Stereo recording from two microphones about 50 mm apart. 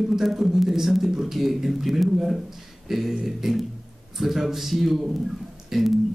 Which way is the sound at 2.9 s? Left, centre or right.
Centre.